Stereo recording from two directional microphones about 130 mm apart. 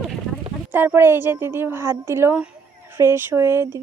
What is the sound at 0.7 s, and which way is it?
A woman's voice, 15° right (ahead or behind).